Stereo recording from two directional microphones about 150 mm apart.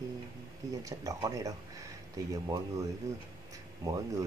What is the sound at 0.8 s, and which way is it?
Speech, 20° right (ahead or behind).